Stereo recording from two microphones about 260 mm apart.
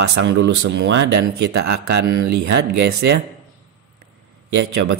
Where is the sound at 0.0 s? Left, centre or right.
Right.